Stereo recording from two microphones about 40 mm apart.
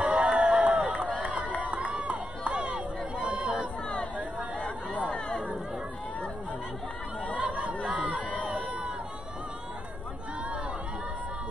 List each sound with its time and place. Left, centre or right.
0.0 s crowd: right
1.6 s run: right
7.3 s chatter: right
8.5 s a sound: right